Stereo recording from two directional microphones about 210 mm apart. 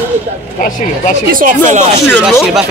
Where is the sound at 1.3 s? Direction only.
35° right (ahead or behind).